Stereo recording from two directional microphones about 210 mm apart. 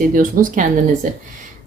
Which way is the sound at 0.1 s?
40° right (ahead or behind).